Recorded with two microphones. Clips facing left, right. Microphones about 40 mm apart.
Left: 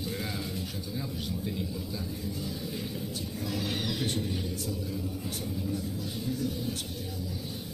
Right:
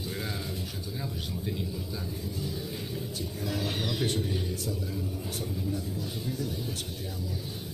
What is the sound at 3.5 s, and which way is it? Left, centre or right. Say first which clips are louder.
Speech: right 1 dB; right.